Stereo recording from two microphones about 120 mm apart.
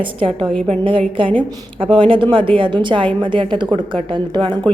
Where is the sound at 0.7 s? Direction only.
45° right (ahead or behind).